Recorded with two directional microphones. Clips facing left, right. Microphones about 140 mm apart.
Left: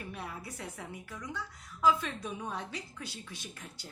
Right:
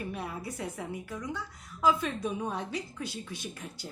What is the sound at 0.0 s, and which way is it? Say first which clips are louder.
A woman's voice: right 5 dB; 15° right (ahead or behind).